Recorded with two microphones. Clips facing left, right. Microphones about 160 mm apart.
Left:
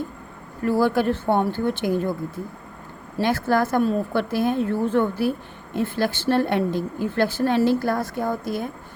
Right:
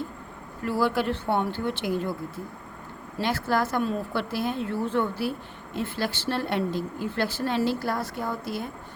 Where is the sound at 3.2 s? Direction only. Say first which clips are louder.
Left 5 dB; 50° left (ahead or behind).